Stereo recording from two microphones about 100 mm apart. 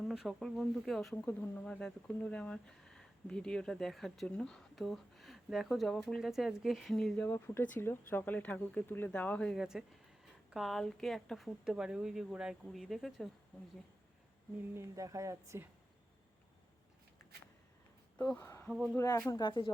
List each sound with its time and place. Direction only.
0.0 s speech: centre (ahead or behind)
1.1 s speech: 20° left (ahead or behind); by 7.1 s centre (ahead or behind)
7.3 s speech: 25° left (ahead or behind)
9.6 s speech: 5° right (ahead or behind)
14.8 s speech: 35° right (ahead or behind)
18.3 s speech: 30° left (ahead or behind)
19.4 s speech: 55° left (ahead or behind)